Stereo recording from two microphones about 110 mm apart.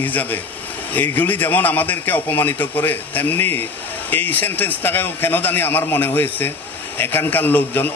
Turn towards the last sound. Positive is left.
turn(degrees=15)  # may be behind; listen again after turning